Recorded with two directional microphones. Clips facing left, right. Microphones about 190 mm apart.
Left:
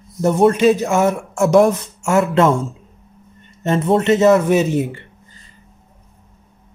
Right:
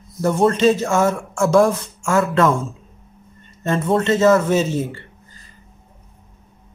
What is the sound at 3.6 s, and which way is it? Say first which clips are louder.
Speech: left 3 dB; 20° left (ahead or behind).